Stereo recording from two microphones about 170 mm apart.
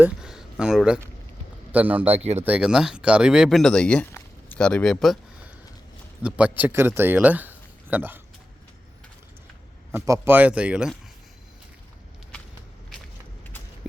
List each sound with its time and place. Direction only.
0.0 s a sound: 5° right (ahead or behind)
1.7 s speech: 10° right (ahead or behind)
2.0 s speech: 35° right (ahead or behind)
2.4 s speech: 5° right (ahead or behind)
9.9 s speech: 10° right (ahead or behind)